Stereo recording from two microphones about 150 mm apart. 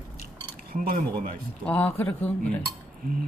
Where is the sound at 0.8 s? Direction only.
75° right (ahead or behind).